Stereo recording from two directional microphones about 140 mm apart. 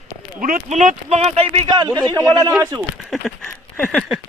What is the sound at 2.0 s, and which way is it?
Speech, 30° right (ahead or behind).